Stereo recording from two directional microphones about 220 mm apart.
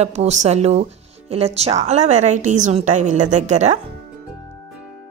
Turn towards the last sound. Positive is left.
turn(degrees=-30)  # may be behind; listen again after turning